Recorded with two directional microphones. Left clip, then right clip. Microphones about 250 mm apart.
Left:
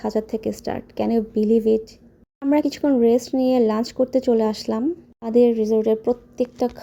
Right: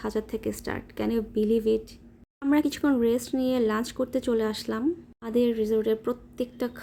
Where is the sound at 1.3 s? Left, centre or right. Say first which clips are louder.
Left 3 dB; left.